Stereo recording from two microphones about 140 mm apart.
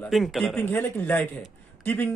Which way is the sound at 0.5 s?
15° left (ahead or behind).